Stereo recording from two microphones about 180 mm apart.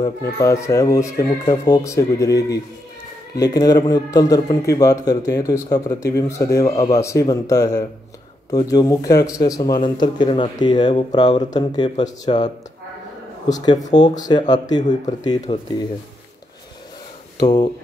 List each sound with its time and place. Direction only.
0.2 s a man's voice: 15° left (ahead or behind)
13.5 s a man's voice: 20° left (ahead or behind)
17.4 s speech: 20° left (ahead or behind)